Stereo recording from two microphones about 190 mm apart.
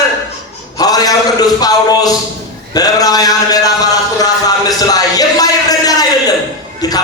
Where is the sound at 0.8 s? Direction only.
20° left (ahead or behind).